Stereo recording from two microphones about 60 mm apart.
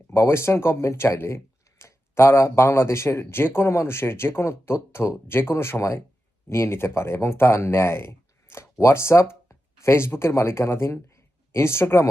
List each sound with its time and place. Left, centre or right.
0.1 s speech: left